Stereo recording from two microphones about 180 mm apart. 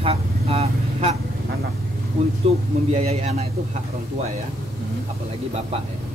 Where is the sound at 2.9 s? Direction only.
35° right (ahead or behind).